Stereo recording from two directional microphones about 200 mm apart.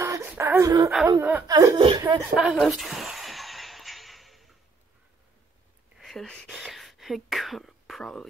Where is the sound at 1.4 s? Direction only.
20° right (ahead or behind).